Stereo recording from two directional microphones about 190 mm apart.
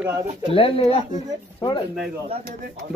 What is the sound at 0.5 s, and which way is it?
Speech, 30° left (ahead or behind).